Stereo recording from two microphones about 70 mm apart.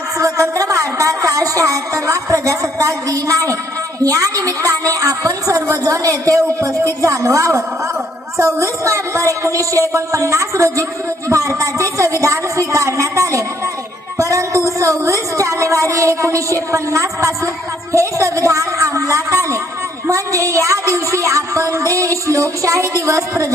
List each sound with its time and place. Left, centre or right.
0.2 s music: right
4.0 s a woman's voice: right